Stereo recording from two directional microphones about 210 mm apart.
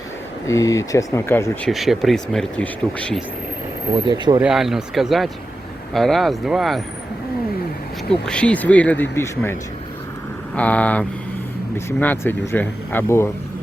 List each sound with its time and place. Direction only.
0.4 s speech: 15° left (ahead or behind)
1.7 s speech: centre (ahead or behind)
3.9 s speech: 20° right (ahead or behind)
4.4 s speech: centre (ahead or behind)
8.2 s speech: 5° left (ahead or behind)